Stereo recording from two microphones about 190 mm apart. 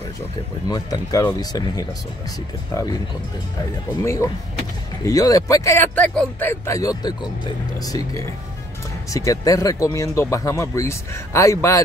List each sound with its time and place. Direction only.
0.7 s speech: 20° left (ahead or behind)
4.0 s speech: 15° left (ahead or behind)